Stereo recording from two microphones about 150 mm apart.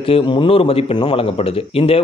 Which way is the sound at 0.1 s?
35° left (ahead or behind).